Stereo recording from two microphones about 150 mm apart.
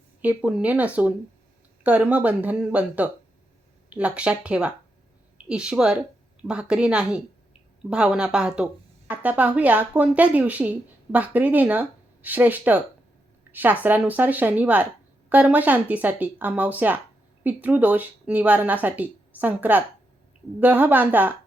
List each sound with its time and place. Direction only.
0.2 s a woman's voice: 10° right (ahead or behind)